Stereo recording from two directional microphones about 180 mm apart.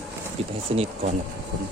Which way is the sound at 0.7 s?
35° right (ahead or behind).